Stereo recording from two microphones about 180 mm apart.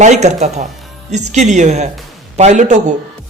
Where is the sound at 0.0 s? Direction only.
40° right (ahead or behind).